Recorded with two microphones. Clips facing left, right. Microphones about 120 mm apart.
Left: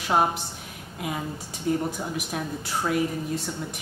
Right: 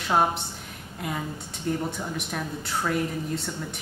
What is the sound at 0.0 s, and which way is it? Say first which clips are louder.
A woman's voice: even; 5° left (ahead or behind).